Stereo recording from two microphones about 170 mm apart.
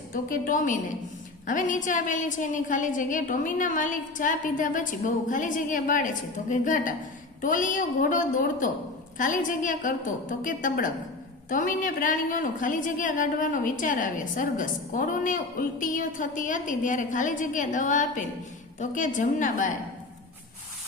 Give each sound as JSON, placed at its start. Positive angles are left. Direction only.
{"t": 0.1, "sound": "a woman's voice", "side_deg": 55}